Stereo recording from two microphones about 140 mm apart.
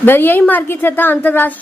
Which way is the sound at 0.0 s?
15° left (ahead or behind).